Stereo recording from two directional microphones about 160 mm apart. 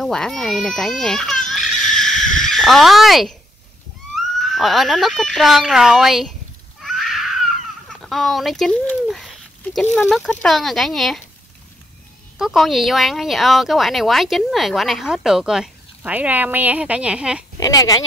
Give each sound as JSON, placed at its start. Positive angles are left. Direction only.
{"t": 0.0, "sound": "speech", "side_deg": 0}
{"t": 1.5, "sound": "a sound", "side_deg": 0}
{"t": 2.2, "sound": "speech", "side_deg": 5}
{"t": 6.8, "sound": "a sound", "side_deg": 0}
{"t": 9.9, "sound": "speech", "side_deg": 0}
{"t": 12.4, "sound": "speech", "side_deg": 0}
{"t": 17.6, "sound": "speech", "side_deg": 25}